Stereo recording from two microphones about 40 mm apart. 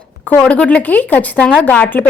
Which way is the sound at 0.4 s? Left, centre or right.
Left.